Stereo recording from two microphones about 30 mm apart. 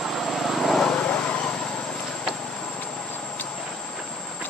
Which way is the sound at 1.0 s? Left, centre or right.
Left.